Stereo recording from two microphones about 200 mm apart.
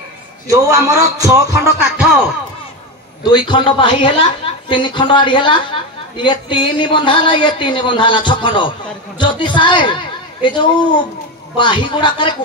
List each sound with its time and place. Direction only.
0.5 s music: 15° right (ahead or behind)
3.3 s speech: 25° left (ahead or behind)